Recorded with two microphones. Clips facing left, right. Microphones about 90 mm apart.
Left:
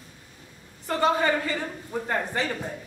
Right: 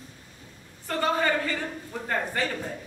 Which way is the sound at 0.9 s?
15° left (ahead or behind).